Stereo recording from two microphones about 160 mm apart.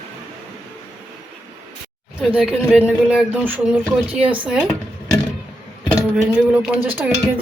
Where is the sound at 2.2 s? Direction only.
5° right (ahead or behind).